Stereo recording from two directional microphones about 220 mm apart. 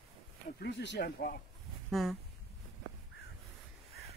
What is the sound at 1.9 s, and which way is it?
Speech, centre (ahead or behind).